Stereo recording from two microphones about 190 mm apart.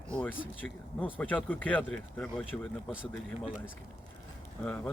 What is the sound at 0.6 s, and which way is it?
Speech, 10° left (ahead or behind).